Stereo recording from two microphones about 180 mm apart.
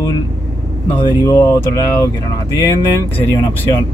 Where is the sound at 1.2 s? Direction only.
15° left (ahead or behind).